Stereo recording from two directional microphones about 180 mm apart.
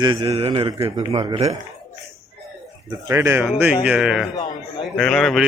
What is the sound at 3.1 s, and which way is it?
A man's voice, 15° right (ahead or behind).